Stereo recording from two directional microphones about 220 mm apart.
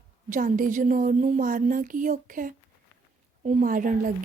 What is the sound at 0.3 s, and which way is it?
A woman's voice, 35° right (ahead or behind).